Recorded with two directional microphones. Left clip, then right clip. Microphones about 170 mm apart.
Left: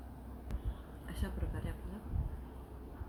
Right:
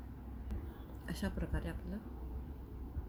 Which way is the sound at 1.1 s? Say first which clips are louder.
Right 4 dB; 55° right (ahead or behind).